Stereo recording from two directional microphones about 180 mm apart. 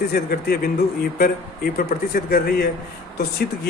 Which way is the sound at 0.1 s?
60° left (ahead or behind).